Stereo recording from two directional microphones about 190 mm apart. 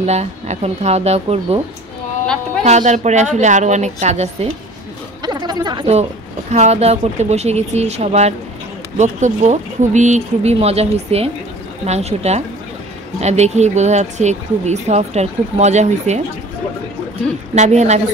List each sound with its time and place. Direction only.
0.0 s speech: 35° right (ahead or behind)
2.6 s speech: 35° right (ahead or behind)
5.2 s a sound: 20° right (ahead or behind)
6.5 s speech: 35° right (ahead or behind)
17.6 s speech: 35° right (ahead or behind)